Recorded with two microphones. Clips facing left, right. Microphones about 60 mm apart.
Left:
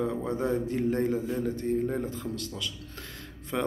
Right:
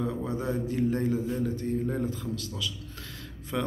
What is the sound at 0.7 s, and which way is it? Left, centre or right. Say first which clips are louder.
A man's voice: even; left.